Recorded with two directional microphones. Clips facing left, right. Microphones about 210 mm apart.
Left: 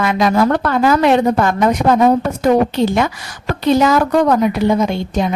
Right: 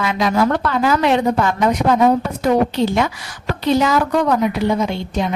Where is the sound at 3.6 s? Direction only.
45° left (ahead or behind).